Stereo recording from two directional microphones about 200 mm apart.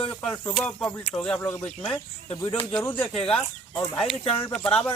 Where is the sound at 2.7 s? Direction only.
10° left (ahead or behind).